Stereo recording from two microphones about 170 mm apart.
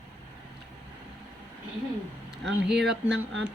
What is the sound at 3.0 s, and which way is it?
Speech, 90° right.